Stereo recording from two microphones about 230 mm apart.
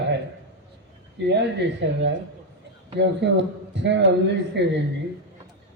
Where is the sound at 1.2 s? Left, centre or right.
Right.